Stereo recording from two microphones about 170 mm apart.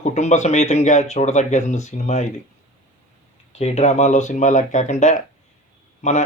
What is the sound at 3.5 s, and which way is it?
A man's voice, 40° left (ahead or behind).